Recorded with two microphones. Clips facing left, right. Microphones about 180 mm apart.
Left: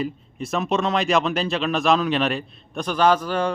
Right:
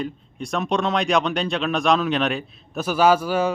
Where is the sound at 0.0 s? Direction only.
5° left (ahead or behind).